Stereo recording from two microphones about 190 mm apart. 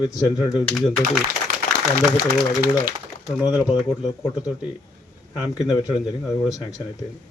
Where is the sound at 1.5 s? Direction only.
50° right (ahead or behind).